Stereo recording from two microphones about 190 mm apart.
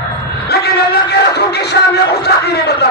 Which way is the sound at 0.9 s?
60° left (ahead or behind).